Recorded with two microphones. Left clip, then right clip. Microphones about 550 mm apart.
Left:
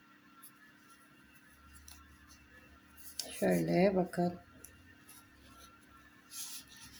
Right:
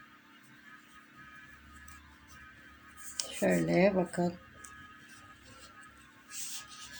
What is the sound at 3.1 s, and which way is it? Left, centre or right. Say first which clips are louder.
Speech: right 3 dB; left.